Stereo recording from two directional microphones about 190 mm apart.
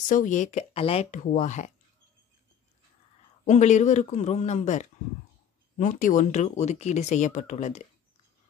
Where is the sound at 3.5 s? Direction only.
40° left (ahead or behind).